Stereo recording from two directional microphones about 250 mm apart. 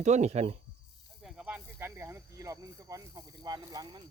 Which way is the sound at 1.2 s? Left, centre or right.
Centre.